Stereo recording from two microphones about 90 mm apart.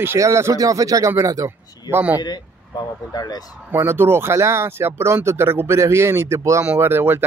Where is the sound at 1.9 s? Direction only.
20° right (ahead or behind).